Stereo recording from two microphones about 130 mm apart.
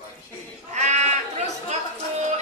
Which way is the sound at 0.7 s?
60° right (ahead or behind).